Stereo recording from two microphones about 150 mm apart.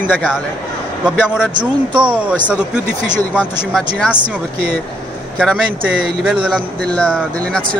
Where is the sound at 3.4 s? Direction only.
5° left (ahead or behind).